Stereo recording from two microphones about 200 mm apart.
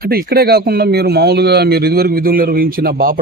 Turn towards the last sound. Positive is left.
turn(degrees=-45)  # may be behind; listen again after turning